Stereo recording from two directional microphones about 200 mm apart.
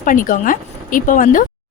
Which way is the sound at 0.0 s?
40° left (ahead or behind).